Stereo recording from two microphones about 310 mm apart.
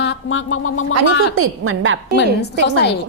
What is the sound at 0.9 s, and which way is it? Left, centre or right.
A woman's voice, right.